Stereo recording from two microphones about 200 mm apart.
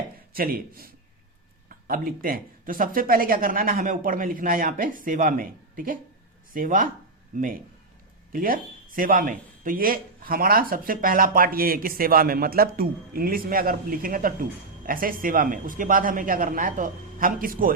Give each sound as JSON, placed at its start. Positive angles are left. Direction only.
{"t": 0.3, "sound": "speech", "side_deg": -45}
{"t": 1.9, "sound": "speech", "side_deg": -45}